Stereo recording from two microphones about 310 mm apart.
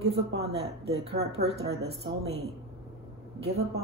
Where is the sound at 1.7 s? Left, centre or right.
Centre.